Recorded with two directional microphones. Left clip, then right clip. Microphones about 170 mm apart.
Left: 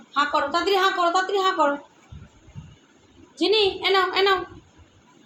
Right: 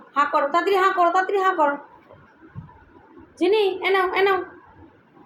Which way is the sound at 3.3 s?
50° left (ahead or behind).